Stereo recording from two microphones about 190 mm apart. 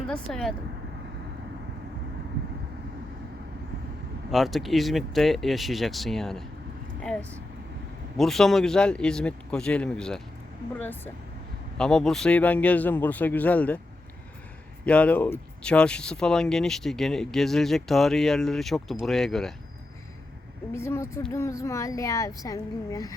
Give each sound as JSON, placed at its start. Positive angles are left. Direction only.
{"t": 0.1, "sound": "speech", "side_deg": 0}
{"t": 4.3, "sound": "speech", "side_deg": 0}
{"t": 14.8, "sound": "speech", "side_deg": 5}
{"t": 20.7, "sound": "speech", "side_deg": 15}